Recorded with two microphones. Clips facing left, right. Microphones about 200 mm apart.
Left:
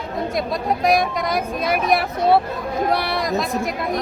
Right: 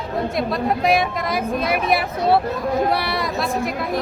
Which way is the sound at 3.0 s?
55° left (ahead or behind).